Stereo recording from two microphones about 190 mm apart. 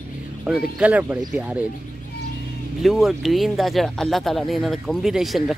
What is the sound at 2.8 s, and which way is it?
Speech, centre (ahead or behind).